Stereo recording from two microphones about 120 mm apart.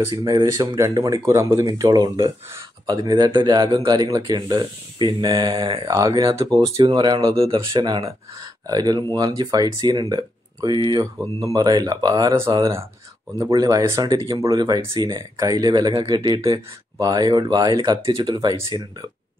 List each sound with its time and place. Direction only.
0.0 s speech: 30° right (ahead or behind)
7.3 s speech: 50° right (ahead or behind); by 19.0 s 30° right (ahead or behind)